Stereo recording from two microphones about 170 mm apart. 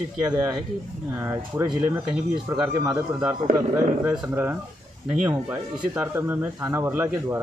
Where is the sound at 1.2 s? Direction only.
10° right (ahead or behind).